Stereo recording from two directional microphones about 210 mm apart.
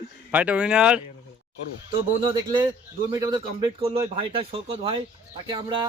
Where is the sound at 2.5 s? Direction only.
20° right (ahead or behind).